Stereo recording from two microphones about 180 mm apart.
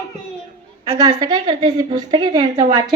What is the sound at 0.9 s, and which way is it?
A woman's voice, 20° right (ahead or behind).